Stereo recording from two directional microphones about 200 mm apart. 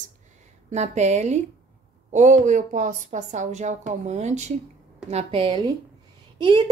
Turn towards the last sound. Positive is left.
turn(degrees=-20)  # may be behind; listen again after turning